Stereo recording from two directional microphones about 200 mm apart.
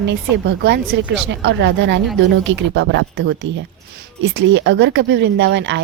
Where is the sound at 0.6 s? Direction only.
55° right (ahead or behind).